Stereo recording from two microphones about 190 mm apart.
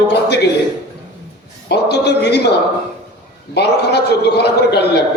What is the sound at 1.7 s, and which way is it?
Speech, 60° left (ahead or behind).